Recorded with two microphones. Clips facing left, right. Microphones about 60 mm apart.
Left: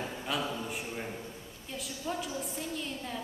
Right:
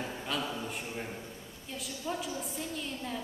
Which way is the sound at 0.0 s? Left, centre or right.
Centre.